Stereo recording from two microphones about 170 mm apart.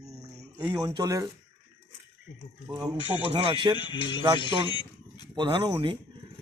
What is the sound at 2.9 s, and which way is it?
Speech, 30° left (ahead or behind).